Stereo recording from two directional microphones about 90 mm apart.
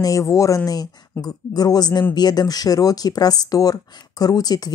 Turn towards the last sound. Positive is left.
turn(degrees=50)  # may be behind; listen again after turning